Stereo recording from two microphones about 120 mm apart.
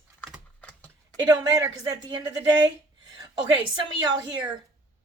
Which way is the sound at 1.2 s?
30° right (ahead or behind).